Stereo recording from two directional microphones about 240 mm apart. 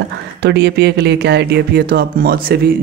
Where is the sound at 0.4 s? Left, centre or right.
Right.